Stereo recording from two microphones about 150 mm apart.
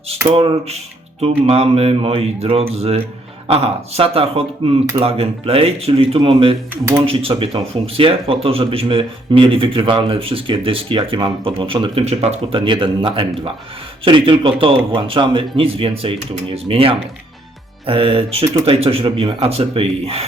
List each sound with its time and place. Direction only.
0.3 s a man's voice: 40° right (ahead or behind)